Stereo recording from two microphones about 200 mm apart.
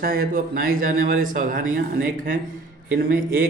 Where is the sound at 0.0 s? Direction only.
50° right (ahead or behind).